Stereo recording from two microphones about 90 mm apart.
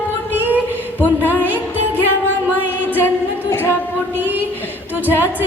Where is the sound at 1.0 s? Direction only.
20° left (ahead or behind).